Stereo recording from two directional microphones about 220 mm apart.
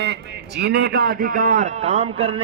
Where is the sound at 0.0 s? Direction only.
50° right (ahead or behind).